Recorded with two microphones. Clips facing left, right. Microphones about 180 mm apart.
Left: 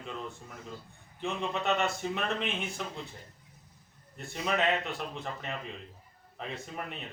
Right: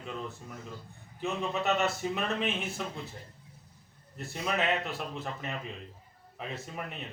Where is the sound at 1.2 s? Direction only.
5° right (ahead or behind).